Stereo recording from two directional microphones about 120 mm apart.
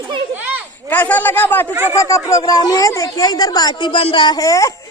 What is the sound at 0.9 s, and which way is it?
Speech, 15° left (ahead or behind).